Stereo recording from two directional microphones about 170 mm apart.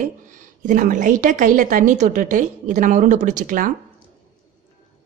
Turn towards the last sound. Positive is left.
turn(degrees=-50)  # may be behind; listen again after turning